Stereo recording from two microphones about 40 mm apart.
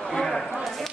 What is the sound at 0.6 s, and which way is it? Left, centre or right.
Clip-clop, centre.